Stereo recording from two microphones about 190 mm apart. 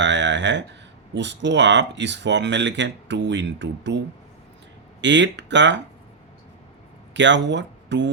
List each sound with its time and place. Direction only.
0.0 s speech: 70° right (ahead or behind)
7.1 s speech: 70° right (ahead or behind)